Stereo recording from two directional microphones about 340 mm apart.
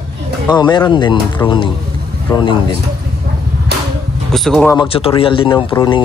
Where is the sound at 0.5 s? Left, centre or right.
Centre.